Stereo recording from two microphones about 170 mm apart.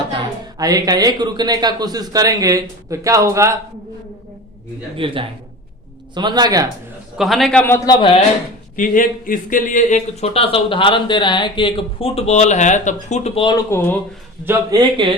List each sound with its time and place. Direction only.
0.6 s a man's voice: 20° right (ahead or behind)
4.9 s a man's voice: 30° right (ahead or behind)
7.2 s a man's voice: centre (ahead or behind)
7.9 s speech: 30° left (ahead or behind)
8.7 s speech: 50° left (ahead or behind); by 13.9 s 15° left (ahead or behind)
14.4 s a man's voice: 20° right (ahead or behind)